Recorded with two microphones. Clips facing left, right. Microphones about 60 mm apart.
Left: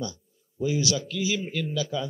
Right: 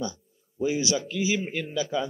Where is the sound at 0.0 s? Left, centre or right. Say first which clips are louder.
Right 2 dB; right.